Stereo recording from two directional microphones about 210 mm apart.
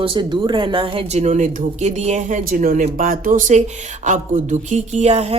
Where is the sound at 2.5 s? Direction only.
40° right (ahead or behind).